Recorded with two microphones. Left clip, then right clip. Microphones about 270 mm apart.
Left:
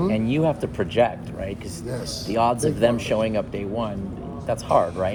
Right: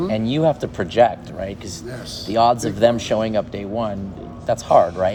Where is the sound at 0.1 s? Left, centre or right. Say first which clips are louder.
Right 4 dB; right.